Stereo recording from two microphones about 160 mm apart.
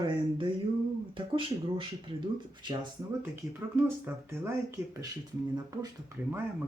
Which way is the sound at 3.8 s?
15° right (ahead or behind).